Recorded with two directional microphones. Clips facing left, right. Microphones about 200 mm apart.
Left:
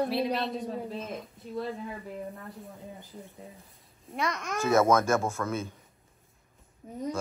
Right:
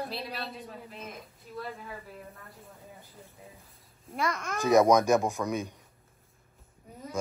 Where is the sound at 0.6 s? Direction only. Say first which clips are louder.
Left 8 dB; 30° left (ahead or behind).